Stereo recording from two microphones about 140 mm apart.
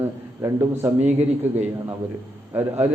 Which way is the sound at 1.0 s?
50° right (ahead or behind).